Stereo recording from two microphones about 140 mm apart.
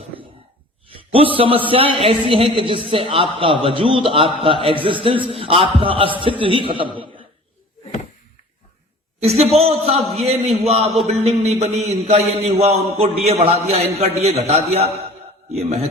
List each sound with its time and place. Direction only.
1.1 s a man's voice: 40° right (ahead or behind)
9.2 s a man's voice: 45° right (ahead or behind)